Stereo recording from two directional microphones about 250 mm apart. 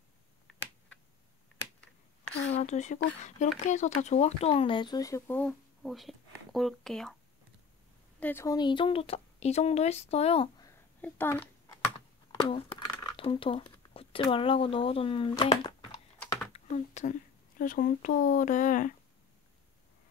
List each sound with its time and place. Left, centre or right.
2.5 s speech: left; by 7.2 s centre
8.2 s speech: centre
10.7 s a sound: centre
12.3 s speech: centre